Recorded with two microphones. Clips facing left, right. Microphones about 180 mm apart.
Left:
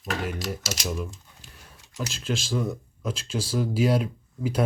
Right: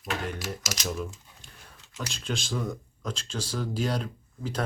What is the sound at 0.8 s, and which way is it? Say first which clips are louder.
Speech: even; 5° left (ahead or behind).